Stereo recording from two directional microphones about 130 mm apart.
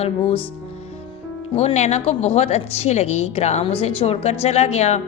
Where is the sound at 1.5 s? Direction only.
55° left (ahead or behind).